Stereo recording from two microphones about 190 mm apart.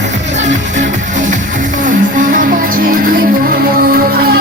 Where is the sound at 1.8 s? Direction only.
45° right (ahead or behind).